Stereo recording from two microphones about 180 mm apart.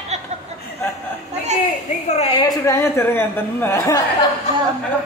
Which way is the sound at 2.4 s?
20° left (ahead or behind).